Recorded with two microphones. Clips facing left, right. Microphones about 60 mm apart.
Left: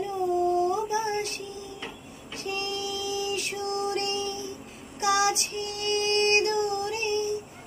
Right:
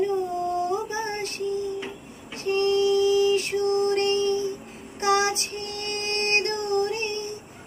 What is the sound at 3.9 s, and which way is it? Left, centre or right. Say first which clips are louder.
Music: right 7 dB; right.